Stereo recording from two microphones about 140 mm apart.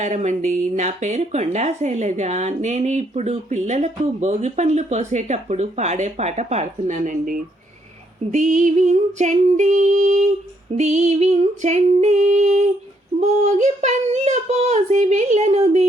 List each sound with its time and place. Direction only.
0.0 s speech: 55° right (ahead or behind)
8.3 s speech: 60° right (ahead or behind)